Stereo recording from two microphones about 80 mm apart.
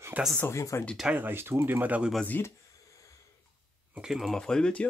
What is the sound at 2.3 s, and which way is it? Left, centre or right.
Speech, left.